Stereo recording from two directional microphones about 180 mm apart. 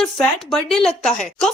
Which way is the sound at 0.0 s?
Centre (ahead or behind).